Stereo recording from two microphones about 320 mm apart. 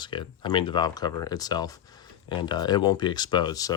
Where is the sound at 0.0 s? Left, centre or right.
Centre.